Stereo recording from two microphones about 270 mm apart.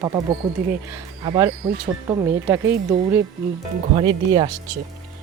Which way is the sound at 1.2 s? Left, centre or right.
Centre.